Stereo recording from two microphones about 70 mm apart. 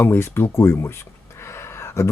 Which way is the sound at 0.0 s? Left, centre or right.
Left.